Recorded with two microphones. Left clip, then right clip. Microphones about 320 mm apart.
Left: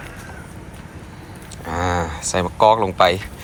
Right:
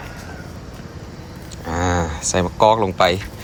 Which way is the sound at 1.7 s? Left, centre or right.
Centre.